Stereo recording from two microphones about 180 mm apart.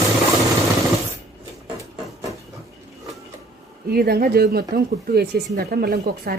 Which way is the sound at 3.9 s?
60° right (ahead or behind).